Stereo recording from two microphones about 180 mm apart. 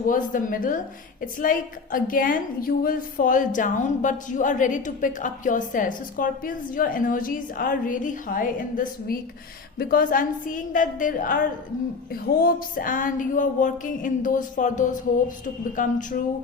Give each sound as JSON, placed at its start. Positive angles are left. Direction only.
{"t": 0.0, "sound": "a woman's voice", "side_deg": 50}